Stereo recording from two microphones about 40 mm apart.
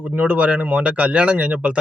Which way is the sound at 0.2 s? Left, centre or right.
Right.